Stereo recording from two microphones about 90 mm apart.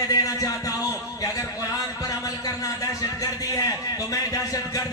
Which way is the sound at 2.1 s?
40° left (ahead or behind).